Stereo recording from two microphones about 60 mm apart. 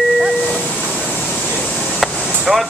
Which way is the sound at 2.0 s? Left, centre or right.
Centre.